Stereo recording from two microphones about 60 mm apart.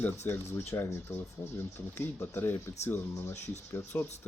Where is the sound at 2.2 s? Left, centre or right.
Left.